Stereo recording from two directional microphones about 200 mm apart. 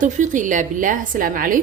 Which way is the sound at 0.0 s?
40° right (ahead or behind).